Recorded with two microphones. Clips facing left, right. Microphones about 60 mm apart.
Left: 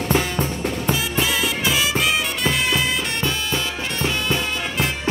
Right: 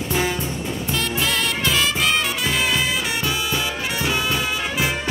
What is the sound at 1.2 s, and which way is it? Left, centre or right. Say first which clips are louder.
Music: left 1 dB; centre.